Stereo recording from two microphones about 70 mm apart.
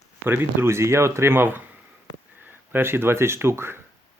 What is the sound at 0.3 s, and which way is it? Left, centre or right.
Speech, right.